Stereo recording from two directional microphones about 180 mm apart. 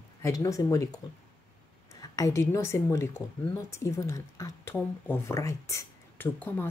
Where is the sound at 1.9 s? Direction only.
20° left (ahead or behind).